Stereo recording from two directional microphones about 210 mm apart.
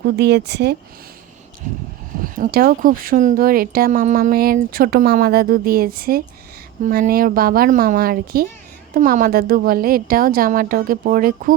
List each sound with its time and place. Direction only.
0.0 s speech: 50° right (ahead or behind)
2.1 s speech: 40° right (ahead or behind)